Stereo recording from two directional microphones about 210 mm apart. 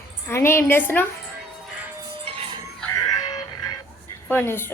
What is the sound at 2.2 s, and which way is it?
Music, 30° right (ahead or behind).